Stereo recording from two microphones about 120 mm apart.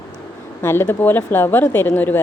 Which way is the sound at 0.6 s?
20° left (ahead or behind).